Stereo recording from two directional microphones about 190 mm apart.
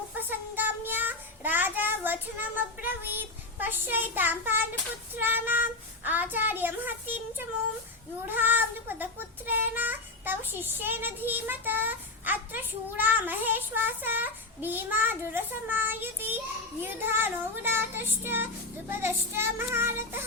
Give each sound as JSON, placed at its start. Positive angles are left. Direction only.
{"t": 0.2, "sound": "child singing", "side_deg": -10}
{"t": 2.6, "sound": "a child's voice", "side_deg": -10}